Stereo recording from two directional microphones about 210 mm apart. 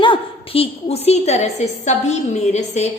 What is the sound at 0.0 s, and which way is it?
A woman's voice, 25° left (ahead or behind).